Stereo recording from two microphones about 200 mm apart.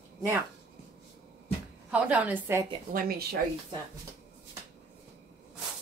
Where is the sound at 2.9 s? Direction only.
50° right (ahead or behind).